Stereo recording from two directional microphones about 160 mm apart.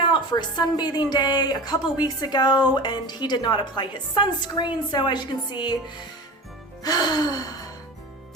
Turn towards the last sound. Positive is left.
turn(degrees=25)  # may be behind; listen again after turning